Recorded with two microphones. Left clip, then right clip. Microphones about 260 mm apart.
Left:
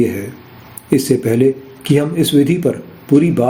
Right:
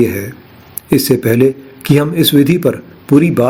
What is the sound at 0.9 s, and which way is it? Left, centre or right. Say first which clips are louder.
Speech: right 2 dB; right.